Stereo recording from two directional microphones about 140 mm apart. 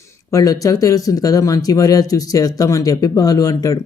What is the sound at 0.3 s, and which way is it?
Speech, 25° left (ahead or behind).